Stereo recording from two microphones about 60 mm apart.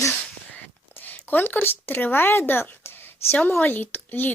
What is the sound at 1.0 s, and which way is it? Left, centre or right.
A woman's voice, left.